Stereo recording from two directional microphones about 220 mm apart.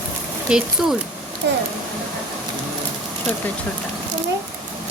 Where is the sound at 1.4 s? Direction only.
55° right (ahead or behind).